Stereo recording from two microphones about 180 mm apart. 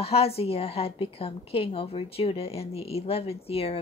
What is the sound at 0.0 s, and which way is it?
A woman's voice, 35° left (ahead or behind).